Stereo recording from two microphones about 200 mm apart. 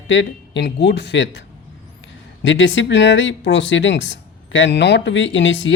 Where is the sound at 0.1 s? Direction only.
60° left (ahead or behind).